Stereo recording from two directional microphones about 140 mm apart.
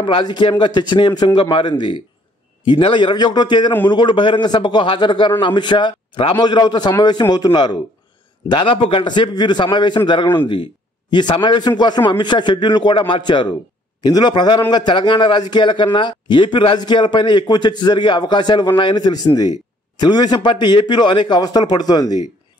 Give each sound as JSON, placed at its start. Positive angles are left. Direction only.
{"t": 0.0, "sound": "a man's voice", "side_deg": 35}